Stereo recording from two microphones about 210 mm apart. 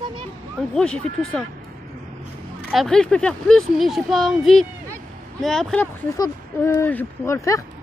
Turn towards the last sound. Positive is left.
turn(degrees=15)  # may be behind; listen again after turning